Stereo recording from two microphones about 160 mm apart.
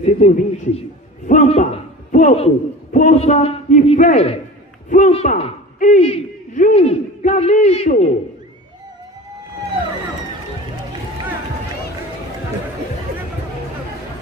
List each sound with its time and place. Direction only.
0.0 s a man's voice: 45° left (ahead or behind)